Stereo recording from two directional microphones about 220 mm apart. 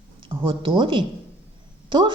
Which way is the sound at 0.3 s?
20° right (ahead or behind).